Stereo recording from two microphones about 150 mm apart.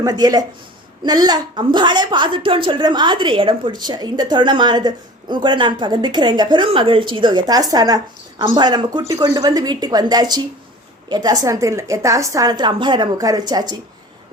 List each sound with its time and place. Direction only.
0.0 s a woman's voice: 25° right (ahead or behind)